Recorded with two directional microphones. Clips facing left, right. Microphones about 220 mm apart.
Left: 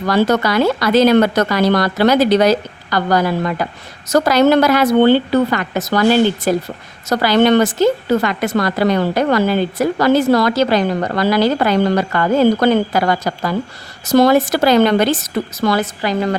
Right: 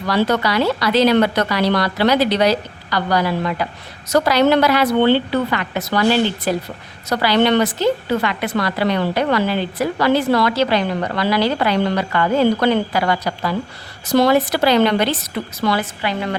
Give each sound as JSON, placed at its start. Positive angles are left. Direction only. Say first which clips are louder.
{"t": 0.0, "sound": "a woman's voice", "louder": "left 3 dB", "side_deg": 45}